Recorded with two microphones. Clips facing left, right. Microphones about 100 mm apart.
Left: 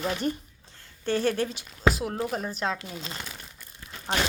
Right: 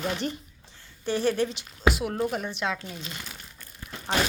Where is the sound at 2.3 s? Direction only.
35° left (ahead or behind).